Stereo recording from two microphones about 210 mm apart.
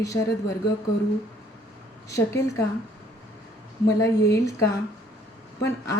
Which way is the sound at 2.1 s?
15° left (ahead or behind).